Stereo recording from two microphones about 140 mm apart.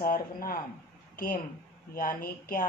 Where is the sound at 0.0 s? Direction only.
90° left.